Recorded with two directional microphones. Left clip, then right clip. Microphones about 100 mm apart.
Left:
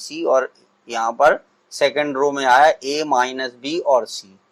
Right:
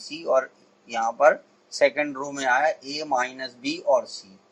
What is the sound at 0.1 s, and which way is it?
Speech, 40° left (ahead or behind).